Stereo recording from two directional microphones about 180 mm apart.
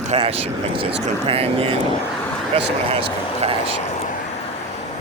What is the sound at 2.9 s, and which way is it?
Speech, 35° right (ahead or behind).